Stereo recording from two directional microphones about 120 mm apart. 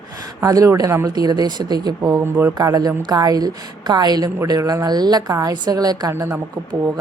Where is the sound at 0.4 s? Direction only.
30° right (ahead or behind).